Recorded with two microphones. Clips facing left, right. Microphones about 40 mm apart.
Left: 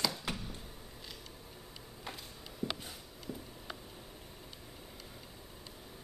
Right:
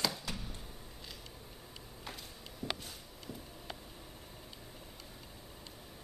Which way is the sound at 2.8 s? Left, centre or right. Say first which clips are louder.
Left 1 dB; centre.